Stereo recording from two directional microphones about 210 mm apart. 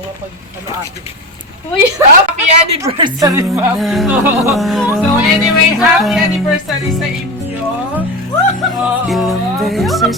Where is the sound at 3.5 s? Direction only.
Centre (ahead or behind).